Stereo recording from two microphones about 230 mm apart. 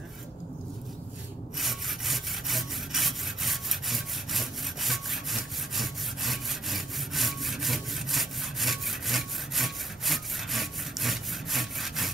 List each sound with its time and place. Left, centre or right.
1.6 s sawing: centre